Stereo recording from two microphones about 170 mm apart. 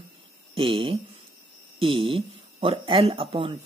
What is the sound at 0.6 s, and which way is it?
Speech, 35° right (ahead or behind).